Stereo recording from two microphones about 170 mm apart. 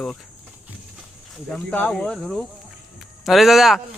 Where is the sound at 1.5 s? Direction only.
5° left (ahead or behind).